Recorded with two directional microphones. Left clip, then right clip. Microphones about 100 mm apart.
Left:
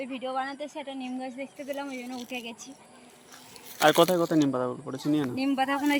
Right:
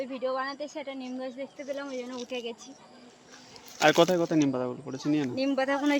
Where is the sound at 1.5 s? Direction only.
20° right (ahead or behind).